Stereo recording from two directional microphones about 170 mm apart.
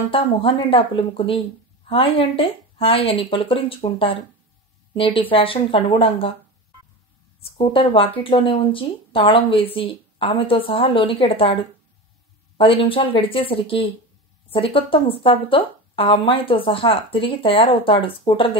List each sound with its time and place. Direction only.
0.1 s speech: 30° left (ahead or behind)
7.4 s speech: 30° left (ahead or behind)
12.5 s speech: 30° left (ahead or behind)